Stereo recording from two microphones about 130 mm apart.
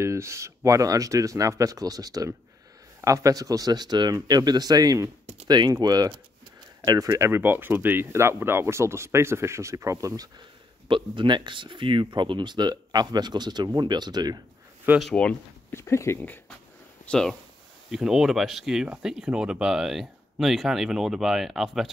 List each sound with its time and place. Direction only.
0.0 s speech: 20° right (ahead or behind)
10.9 s speech: 40° right (ahead or behind)
15.0 s speech: 5° left (ahead or behind)
15.7 s speech: 20° left (ahead or behind)
17.0 s speech: 5° left (ahead or behind)